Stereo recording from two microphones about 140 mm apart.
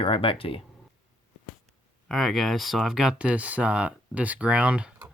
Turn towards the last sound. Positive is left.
turn(degrees=-10)  # may be behind; listen again after turning